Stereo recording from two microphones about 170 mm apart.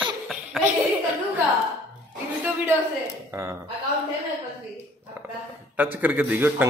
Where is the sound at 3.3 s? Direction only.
20° right (ahead or behind).